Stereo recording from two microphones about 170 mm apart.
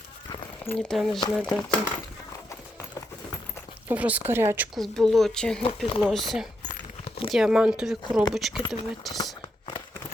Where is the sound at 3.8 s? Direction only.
10° right (ahead or behind).